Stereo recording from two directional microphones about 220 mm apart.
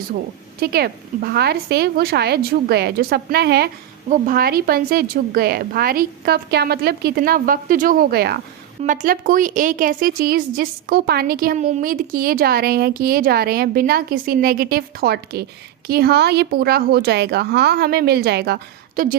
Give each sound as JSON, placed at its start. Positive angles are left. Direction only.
{"t": 0.6, "sound": "a woman's voice", "side_deg": -45}
{"t": 8.8, "sound": "a woman's voice", "side_deg": -35}